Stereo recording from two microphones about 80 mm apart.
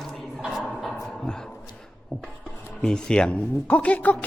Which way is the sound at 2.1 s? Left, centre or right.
Centre.